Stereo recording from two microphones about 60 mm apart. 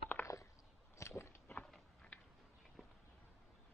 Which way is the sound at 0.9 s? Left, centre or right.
Left.